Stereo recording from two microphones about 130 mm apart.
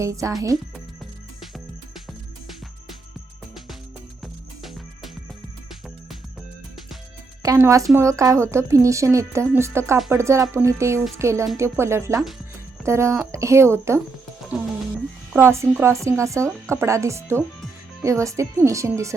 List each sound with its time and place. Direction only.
0.0 s speech: 25° right (ahead or behind)
4.2 s music: centre (ahead or behind)
7.4 s a woman's voice: 25° right (ahead or behind)
15.4 s speech: 20° right (ahead or behind)